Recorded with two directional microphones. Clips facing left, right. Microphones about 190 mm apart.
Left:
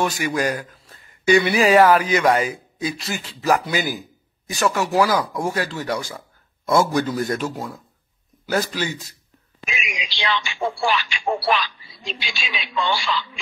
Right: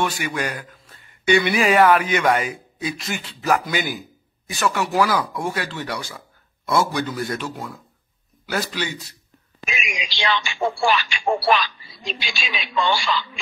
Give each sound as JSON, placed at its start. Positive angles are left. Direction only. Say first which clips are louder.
{"t": 0.0, "sound": "a man's voice", "louder": "left 3 dB", "side_deg": 35}
{"t": 9.6, "sound": "speech", "louder": "right 1 dB", "side_deg": -45}